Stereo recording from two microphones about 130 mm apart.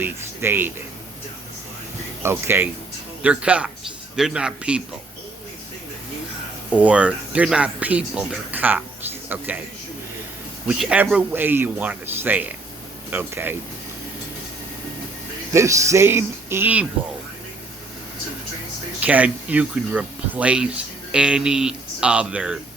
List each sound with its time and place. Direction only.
0.0 s speech: 15° right (ahead or behind)
2.2 s a man's voice: 20° right (ahead or behind)
6.7 s speech: 10° right (ahead or behind)
10.7 s speech: 10° right (ahead or behind)
15.5 s speech: 25° right (ahead or behind)
18.9 s speech: 10° right (ahead or behind)